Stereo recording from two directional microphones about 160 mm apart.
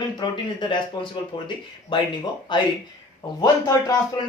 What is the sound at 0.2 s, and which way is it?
Speech, 30° left (ahead or behind).